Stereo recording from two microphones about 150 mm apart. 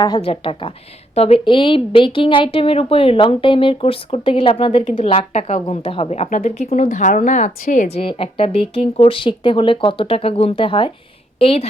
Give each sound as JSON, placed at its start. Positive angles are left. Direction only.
{"t": 0.0, "sound": "a woman's voice", "side_deg": 35}
{"t": 6.8, "sound": "speech", "side_deg": 60}